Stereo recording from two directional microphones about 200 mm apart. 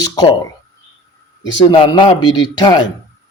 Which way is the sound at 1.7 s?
25° left (ahead or behind).